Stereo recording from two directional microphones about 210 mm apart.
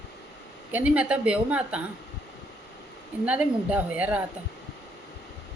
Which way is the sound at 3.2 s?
5° right (ahead or behind).